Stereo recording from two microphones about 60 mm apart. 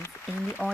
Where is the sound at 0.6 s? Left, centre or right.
Right.